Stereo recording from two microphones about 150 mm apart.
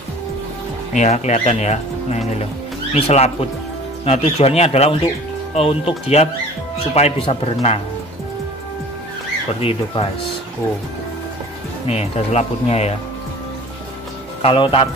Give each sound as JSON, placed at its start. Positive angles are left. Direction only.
{"t": 0.9, "sound": "a man's voice", "side_deg": 50}
{"t": 9.5, "sound": "a man's voice", "side_deg": 40}
{"t": 11.9, "sound": "speech", "side_deg": 45}
{"t": 14.4, "sound": "a man's voice", "side_deg": 35}